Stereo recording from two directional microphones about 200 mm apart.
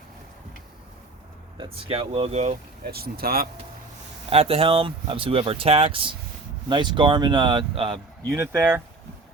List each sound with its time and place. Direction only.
1.5 s speech: 30° right (ahead or behind)
2.8 s speech: 50° right (ahead or behind)
4.3 s speech: 30° right (ahead or behind); by 8.8 s 15° right (ahead or behind)